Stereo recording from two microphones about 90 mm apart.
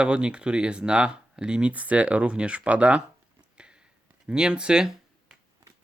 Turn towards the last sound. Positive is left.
turn(degrees=-10)  # may be behind; listen again after turning